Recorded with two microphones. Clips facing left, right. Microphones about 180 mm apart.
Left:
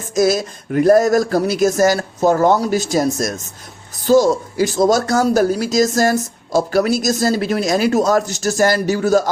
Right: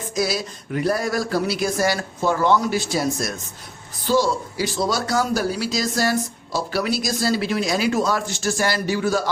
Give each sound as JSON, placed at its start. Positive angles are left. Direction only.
{"t": 0.1, "sound": "speech", "side_deg": 45}